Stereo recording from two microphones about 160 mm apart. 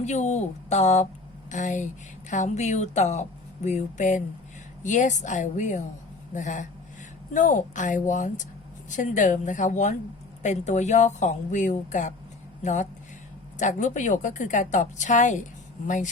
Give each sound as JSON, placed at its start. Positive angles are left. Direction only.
{"t": 0.0, "sound": "speech", "side_deg": 45}